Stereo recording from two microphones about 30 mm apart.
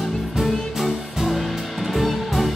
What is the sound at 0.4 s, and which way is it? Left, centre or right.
Music, centre.